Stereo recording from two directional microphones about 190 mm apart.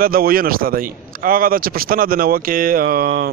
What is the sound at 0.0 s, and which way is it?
Speech, 50° right (ahead or behind).